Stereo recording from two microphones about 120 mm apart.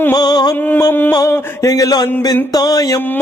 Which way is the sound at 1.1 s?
30° left (ahead or behind).